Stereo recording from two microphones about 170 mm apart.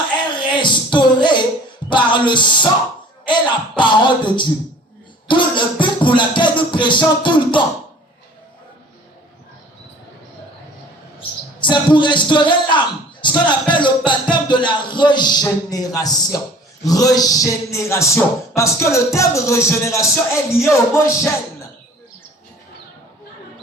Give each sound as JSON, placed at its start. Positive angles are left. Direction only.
{"t": 0.3, "sound": "music", "side_deg": 25}
{"t": 1.9, "sound": "speech", "side_deg": 30}
{"t": 11.6, "sound": "speech", "side_deg": 25}
{"t": 16.8, "sound": "a sound", "side_deg": 20}